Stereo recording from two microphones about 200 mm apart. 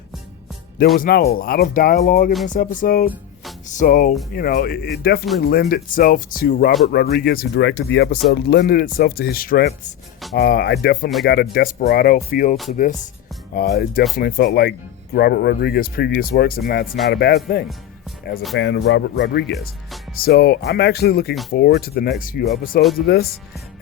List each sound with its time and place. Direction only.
0.9 s speech: 50° left (ahead or behind)
19.5 s speech: centre (ahead or behind)
20.2 s speech: 55° left (ahead or behind)